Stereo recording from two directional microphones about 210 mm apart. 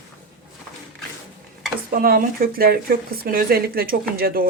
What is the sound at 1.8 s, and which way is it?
Speech, 45° right (ahead or behind).